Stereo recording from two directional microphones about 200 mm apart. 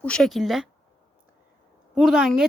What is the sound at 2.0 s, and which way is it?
Speech, 5° right (ahead or behind).